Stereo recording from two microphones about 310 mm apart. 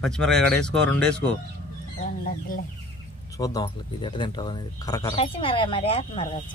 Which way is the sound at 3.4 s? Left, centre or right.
Centre.